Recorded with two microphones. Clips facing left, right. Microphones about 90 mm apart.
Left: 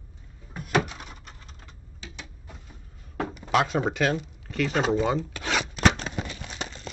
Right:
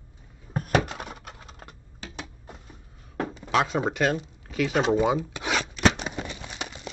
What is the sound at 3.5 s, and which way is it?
Speech, centre (ahead or behind).